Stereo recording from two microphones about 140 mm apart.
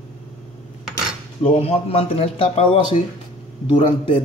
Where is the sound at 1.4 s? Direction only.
45° left (ahead or behind).